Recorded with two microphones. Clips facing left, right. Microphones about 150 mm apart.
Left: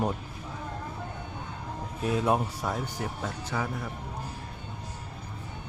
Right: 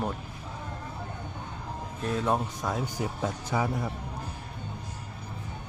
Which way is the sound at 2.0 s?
10° left (ahead or behind).